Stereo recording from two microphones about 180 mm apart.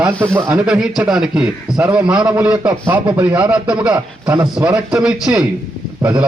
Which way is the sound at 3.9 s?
15° right (ahead or behind).